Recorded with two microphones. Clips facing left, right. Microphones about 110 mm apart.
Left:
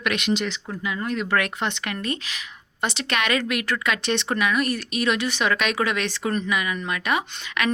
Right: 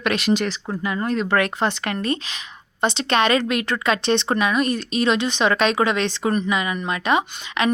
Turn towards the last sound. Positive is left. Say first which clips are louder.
# right 4 dB
turn(degrees=-25)  # may be behind; listen again after turning